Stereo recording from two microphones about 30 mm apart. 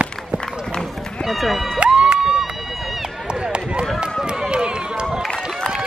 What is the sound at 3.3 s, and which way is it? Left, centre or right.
Run, right.